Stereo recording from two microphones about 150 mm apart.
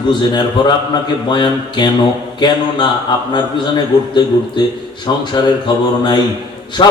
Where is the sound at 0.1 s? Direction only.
30° left (ahead or behind).